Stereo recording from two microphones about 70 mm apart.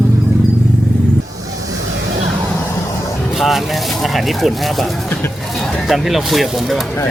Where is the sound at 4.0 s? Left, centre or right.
Centre.